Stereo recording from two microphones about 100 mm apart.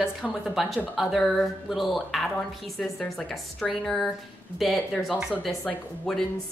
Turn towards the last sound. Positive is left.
turn(degrees=10)  # may be behind; listen again after turning